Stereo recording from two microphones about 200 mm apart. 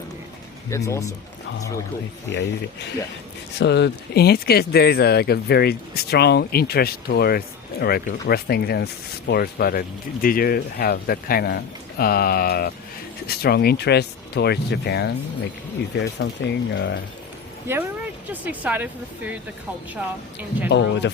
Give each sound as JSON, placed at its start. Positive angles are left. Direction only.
{"t": 0.7, "sound": "speech", "side_deg": 15}
{"t": 3.6, "sound": "speech", "side_deg": 60}
{"t": 17.7, "sound": "speech", "side_deg": -10}
{"t": 20.7, "sound": "speech", "side_deg": 60}